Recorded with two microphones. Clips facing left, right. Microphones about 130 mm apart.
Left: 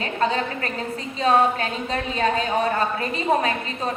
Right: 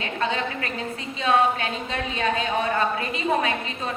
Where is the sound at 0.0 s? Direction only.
40° left (ahead or behind).